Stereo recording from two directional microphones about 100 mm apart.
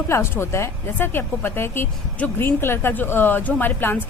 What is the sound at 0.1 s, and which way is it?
Speech, 25° left (ahead or behind).